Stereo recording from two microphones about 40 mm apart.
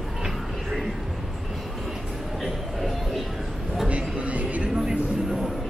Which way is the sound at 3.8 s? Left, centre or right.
Right.